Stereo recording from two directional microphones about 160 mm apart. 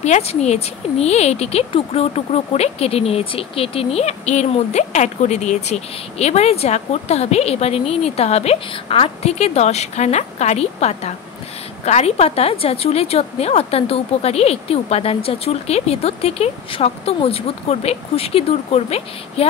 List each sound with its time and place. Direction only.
0.0 s speech: 40° left (ahead or behind)